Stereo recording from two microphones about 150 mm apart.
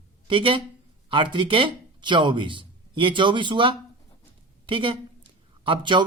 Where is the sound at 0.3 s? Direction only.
35° right (ahead or behind).